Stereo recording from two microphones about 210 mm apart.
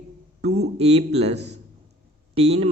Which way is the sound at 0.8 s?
30° right (ahead or behind).